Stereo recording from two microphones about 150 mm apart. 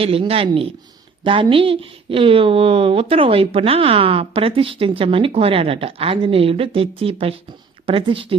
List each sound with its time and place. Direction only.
0.0 s a woman's voice: 40° right (ahead or behind)